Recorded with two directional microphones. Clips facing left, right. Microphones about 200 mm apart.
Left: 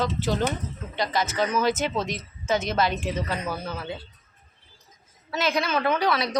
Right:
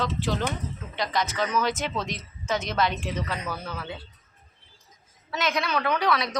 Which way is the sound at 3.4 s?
25° left (ahead or behind).